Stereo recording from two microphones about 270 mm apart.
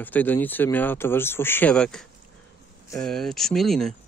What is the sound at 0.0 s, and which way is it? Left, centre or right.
Speech, centre.